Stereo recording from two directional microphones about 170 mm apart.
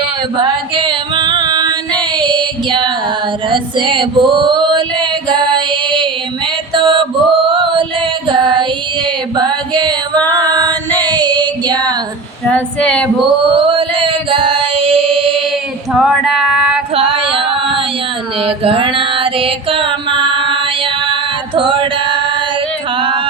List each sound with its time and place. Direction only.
0.3 s music: 30° right (ahead or behind)
3.5 s female singing: 30° right (ahead or behind)
6.7 s mantra: 30° right (ahead or behind)
8.3 s music: 25° right (ahead or behind)
9.3 s a sound: 25° right (ahead or behind)
10.2 s music: 20° right (ahead or behind)
11.1 s female singing: 25° right (ahead or behind)
12.5 s female singing: 5° left (ahead or behind)
13.2 s chant: 30° right (ahead or behind)
15.9 s female singing: centre (ahead or behind)
16.9 s music: 35° right (ahead or behind)
18.4 s mantra: 35° right (ahead or behind)
21.5 s male singing: 30° right (ahead or behind)
23.0 s yodeling: 30° right (ahead or behind)